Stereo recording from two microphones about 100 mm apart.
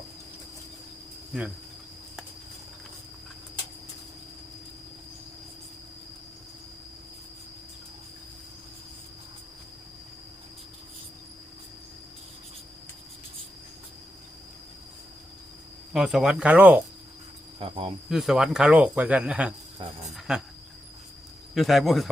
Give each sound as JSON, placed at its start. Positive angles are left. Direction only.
{"t": 15.9, "sound": "speech", "side_deg": -5}
{"t": 17.6, "sound": "cricket", "side_deg": -65}
{"t": 18.1, "sound": "speech", "side_deg": -5}
{"t": 20.1, "sound": "cricket", "side_deg": -5}
{"t": 21.5, "sound": "speech", "side_deg": 0}